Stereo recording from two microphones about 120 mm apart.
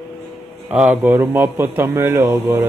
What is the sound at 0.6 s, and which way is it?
Speech, 5° right (ahead or behind).